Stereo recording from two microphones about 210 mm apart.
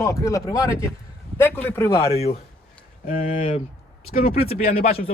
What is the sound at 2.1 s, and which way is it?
Speech, 30° left (ahead or behind).